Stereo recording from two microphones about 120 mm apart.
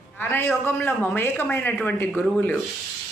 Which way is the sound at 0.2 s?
20° left (ahead or behind).